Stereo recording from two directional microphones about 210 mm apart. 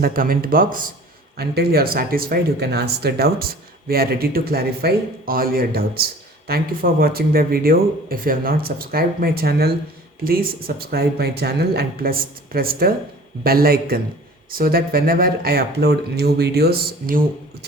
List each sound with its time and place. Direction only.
0.0 s speech: 40° right (ahead or behind)